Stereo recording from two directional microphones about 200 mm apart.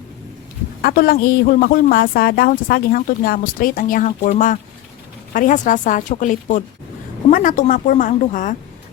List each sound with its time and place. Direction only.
0.8 s a woman's voice: 50° left (ahead or behind)